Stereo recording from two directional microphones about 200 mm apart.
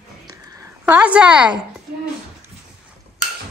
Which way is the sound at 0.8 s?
5° right (ahead or behind).